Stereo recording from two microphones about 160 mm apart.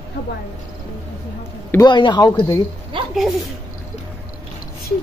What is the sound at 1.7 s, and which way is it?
Speech, 25° left (ahead or behind).